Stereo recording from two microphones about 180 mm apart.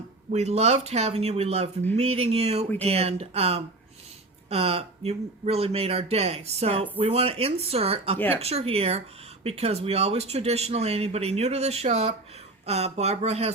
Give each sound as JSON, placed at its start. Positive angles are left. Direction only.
{"t": 0.3, "sound": "speech", "side_deg": -40}